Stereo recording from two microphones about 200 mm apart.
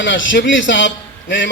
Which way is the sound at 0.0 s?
70° left (ahead or behind).